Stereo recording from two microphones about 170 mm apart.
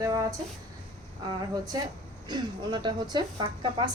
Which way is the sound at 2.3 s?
25° right (ahead or behind).